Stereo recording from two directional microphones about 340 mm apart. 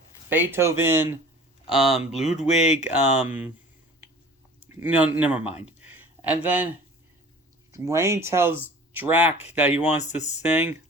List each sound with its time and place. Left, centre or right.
0.3 s speech: centre
2.2 s speech: centre
3.2 s speech: centre
4.7 s speech: centre
9.9 s speech: centre
10.5 s speech: centre